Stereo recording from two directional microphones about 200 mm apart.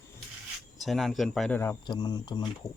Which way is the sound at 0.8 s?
Centre (ahead or behind).